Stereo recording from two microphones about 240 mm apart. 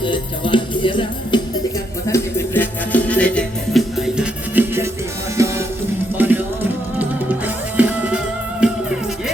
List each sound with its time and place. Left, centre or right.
0.0 s music: centre
2.0 s music: centre